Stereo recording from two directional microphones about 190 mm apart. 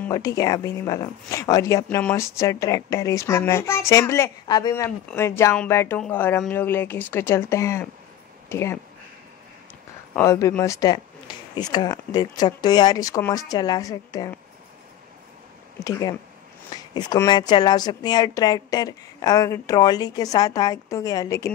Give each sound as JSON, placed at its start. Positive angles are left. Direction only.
{"t": 0.1, "sound": "speech", "side_deg": 20}
{"t": 10.1, "sound": "a woman's voice", "side_deg": 15}
{"t": 15.8, "sound": "a woman's voice", "side_deg": 20}